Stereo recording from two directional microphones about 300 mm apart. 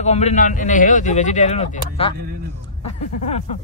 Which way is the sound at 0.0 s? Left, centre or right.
Left.